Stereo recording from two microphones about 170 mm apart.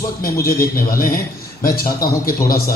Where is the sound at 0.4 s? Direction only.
60° left (ahead or behind).